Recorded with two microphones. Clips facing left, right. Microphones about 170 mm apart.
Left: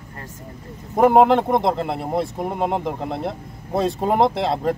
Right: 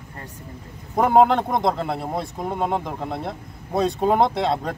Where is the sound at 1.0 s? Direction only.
5° left (ahead or behind).